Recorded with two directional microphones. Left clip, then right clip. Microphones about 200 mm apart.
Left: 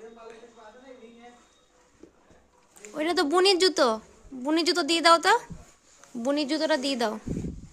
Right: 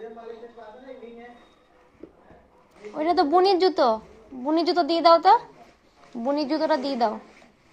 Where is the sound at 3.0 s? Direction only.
35° left (ahead or behind).